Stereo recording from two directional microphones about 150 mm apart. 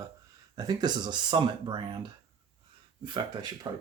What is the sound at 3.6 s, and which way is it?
Speech, 25° right (ahead or behind).